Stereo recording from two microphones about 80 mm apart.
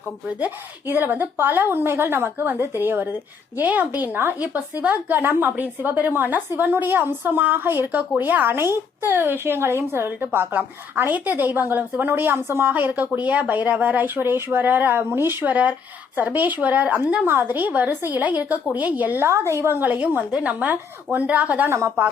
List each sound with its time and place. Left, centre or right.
0.3 s a woman's voice: centre
19.3 s a woman's voice: right
19.8 s a woman's voice: centre
21.7 s a woman's voice: right